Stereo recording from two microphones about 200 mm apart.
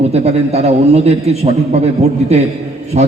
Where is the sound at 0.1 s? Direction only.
30° right (ahead or behind).